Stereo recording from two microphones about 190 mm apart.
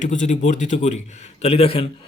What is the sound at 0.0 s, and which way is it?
A man's voice, 40° left (ahead or behind).